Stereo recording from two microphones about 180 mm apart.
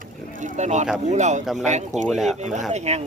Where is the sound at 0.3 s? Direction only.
45° right (ahead or behind).